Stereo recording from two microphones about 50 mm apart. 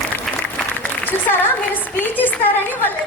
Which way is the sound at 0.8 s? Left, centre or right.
Left.